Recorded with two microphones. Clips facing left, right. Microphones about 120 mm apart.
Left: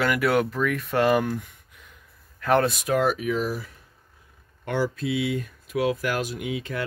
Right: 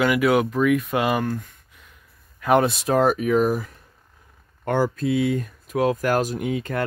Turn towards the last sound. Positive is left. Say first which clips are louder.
# right 5 dB
turn(degrees=-45)  # may be behind; listen again after turning